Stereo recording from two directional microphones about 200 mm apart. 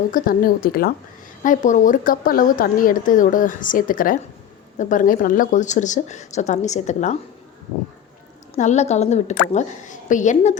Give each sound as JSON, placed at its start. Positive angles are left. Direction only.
{"t": 0.1, "sound": "a woman's voice", "side_deg": 45}
{"t": 8.5, "sound": "a woman's voice", "side_deg": 35}